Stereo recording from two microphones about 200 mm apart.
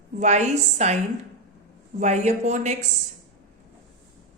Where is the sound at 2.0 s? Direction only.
35° right (ahead or behind).